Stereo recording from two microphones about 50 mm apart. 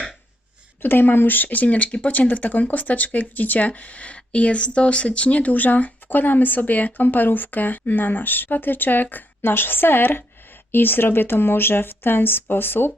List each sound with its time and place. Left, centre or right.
0.8 s speech: left